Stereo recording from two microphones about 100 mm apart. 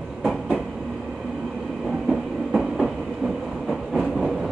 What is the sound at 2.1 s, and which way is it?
Train, 5° right (ahead or behind).